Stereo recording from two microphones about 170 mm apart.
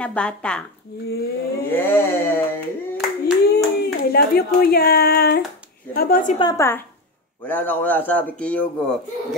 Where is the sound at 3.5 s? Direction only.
65° left (ahead or behind).